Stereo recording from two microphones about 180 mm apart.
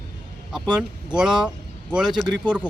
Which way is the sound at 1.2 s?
5° right (ahead or behind).